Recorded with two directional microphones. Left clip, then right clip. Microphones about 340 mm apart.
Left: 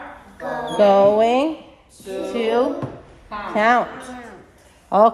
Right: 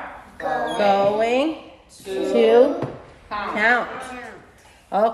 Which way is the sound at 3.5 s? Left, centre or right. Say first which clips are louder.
Left 2 dB; centre.